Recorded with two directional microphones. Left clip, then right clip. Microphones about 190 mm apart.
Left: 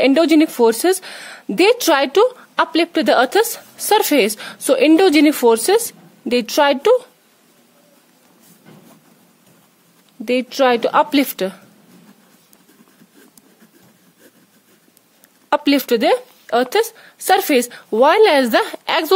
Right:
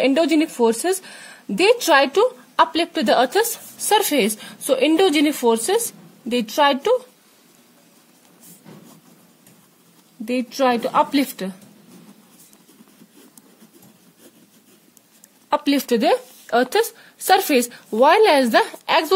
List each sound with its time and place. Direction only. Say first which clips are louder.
0.0 s a woman's voice: left 5 dB; 45° left (ahead or behind)
10.2 s a woman's voice: left 4 dB; 55° left (ahead or behind)
15.5 s speech: left 4 dB; 55° left (ahead or behind)